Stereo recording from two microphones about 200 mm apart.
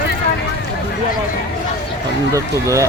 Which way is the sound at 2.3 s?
15° right (ahead or behind).